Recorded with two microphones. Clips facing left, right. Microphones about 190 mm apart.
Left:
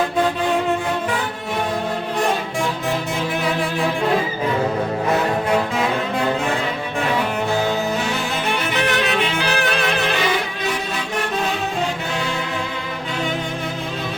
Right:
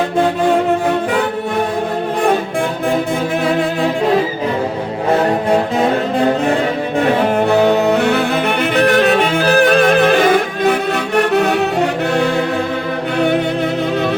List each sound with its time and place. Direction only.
5.5 s music: 35° right (ahead or behind)
7.0 s music: 50° right (ahead or behind)